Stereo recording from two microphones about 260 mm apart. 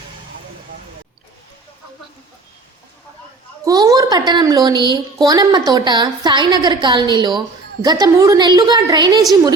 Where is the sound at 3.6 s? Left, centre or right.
Centre.